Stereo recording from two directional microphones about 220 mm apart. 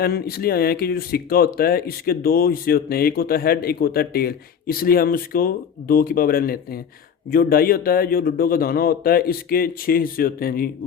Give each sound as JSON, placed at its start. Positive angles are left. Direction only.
{"t": 0.0, "sound": "a man's voice", "side_deg": 45}